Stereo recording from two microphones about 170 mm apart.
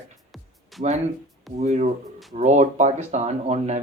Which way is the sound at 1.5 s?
40° right (ahead or behind).